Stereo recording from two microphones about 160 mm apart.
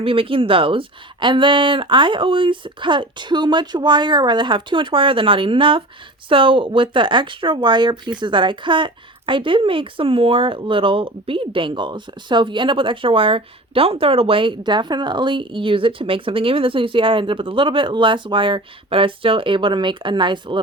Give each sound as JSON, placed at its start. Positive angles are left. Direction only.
{"t": 0.0, "sound": "a woman's voice", "side_deg": -35}